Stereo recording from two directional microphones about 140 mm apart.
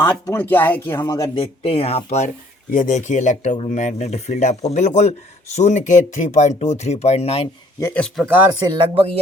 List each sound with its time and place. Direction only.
0.0 s speech: 15° left (ahead or behind)
0.9 s speech: 25° left (ahead or behind)
1.4 s speech: 45° left (ahead or behind)
2.7 s speech: 65° left (ahead or behind); by 7.4 s 50° left (ahead or behind)
7.8 s speech: 15° left (ahead or behind)
8.0 s speech: centre (ahead or behind)
8.5 s speech: 30° right (ahead or behind)